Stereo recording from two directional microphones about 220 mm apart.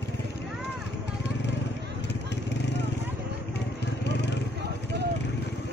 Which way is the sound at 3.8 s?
50° left (ahead or behind).